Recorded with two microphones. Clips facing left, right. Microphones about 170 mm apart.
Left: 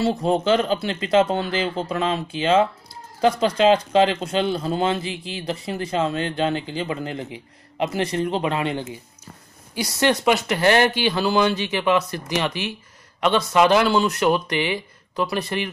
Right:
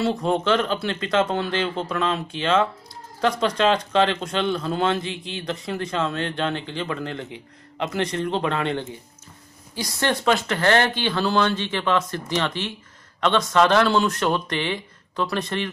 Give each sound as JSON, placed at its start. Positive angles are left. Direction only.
{"t": 0.2, "sound": "a man's voice", "side_deg": 35}
{"t": 0.7, "sound": "speech", "side_deg": 5}
{"t": 4.5, "sound": "a man's voice", "side_deg": 35}
{"t": 4.7, "sound": "speech", "side_deg": 5}